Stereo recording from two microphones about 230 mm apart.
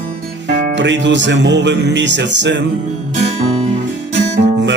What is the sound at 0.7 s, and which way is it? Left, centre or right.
Speech, right.